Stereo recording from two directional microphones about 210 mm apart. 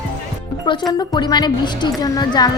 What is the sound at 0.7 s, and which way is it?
A woman's voice, 20° left (ahead or behind).